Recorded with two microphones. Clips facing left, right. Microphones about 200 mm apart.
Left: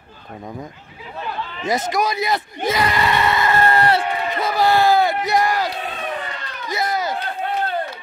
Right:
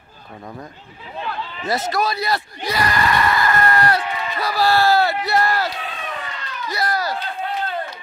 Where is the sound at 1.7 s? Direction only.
15° left (ahead or behind).